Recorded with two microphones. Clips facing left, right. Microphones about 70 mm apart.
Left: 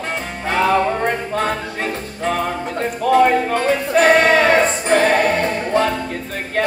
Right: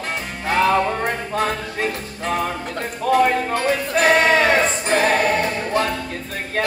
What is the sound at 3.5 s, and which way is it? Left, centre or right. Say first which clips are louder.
Music: left 3 dB; centre.